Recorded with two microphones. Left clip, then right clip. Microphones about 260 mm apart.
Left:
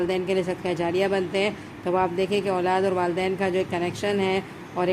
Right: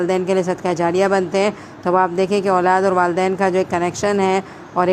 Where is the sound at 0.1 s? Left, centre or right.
Right.